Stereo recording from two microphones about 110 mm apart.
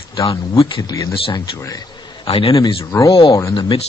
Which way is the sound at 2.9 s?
30° left (ahead or behind).